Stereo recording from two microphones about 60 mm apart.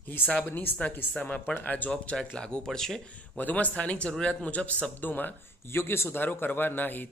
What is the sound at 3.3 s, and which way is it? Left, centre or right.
Speech, left.